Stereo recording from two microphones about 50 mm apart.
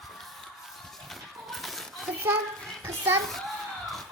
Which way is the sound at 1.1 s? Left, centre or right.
Centre.